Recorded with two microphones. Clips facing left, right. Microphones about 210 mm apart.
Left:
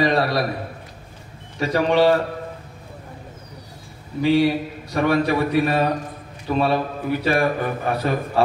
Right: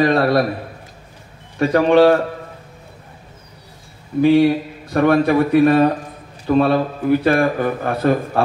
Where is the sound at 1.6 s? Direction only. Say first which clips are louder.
Right 5 dB; 55° right (ahead or behind).